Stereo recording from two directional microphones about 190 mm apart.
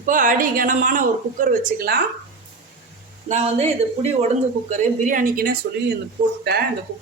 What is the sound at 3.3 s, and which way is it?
Speech, 35° right (ahead or behind).